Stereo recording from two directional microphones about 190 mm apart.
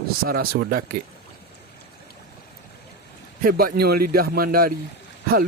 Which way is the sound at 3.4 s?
50° right (ahead or behind).